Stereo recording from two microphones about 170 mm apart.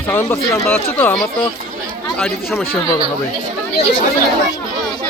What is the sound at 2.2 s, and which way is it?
Speech, 10° left (ahead or behind).